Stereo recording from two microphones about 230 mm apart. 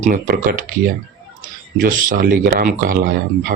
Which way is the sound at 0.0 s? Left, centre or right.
Right.